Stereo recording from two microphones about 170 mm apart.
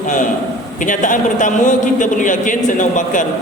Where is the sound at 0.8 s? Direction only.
50° left (ahead or behind).